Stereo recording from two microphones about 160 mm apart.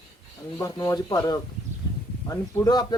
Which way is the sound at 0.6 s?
20° left (ahead or behind).